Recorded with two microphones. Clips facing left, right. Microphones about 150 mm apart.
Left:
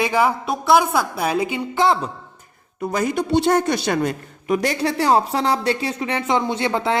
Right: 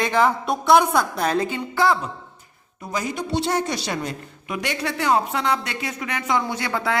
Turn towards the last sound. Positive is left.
turn(degrees=25)  # may be behind; listen again after turning